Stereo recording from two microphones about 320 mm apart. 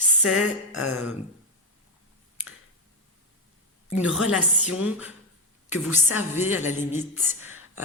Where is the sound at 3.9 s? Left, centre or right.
Centre.